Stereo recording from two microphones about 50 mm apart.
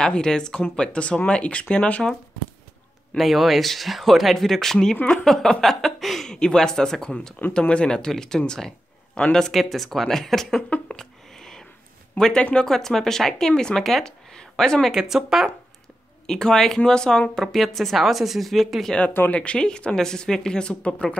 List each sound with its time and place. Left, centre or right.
0.0 s a woman's voice: centre
0.6 s speech: left
3.2 s a woman's voice: centre
9.4 s speech: centre
11.0 s a sound: centre
12.2 s a woman's voice: centre
14.9 s speech: centre
16.3 s a woman's voice: centre
19.3 s speech: left